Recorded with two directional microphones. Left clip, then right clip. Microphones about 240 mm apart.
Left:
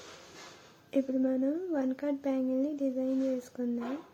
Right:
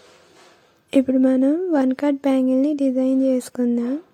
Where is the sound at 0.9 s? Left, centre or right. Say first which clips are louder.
Right 13 dB; right.